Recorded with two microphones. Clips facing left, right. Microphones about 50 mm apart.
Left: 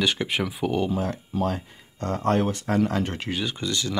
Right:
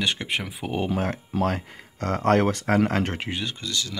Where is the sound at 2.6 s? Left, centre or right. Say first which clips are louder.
Right 2 dB; right.